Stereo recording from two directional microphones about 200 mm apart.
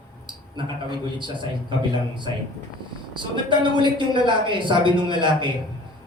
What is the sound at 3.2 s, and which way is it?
A man's voice, 25° right (ahead or behind).